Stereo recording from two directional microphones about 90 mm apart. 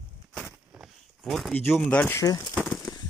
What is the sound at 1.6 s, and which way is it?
Speech, 20° left (ahead or behind).